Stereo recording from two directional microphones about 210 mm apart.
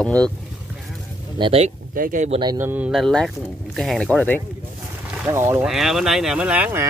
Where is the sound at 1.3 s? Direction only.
25° right (ahead or behind).